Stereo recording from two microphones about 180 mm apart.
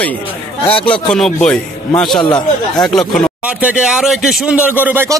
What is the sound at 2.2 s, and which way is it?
Speech, 25° left (ahead or behind).